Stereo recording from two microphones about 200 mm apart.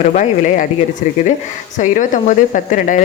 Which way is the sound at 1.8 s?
40° left (ahead or behind).